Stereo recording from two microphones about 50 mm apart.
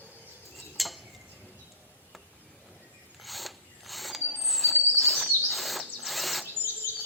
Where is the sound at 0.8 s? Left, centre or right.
Centre.